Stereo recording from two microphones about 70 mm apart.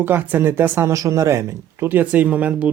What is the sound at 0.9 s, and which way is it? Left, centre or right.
Speech, right.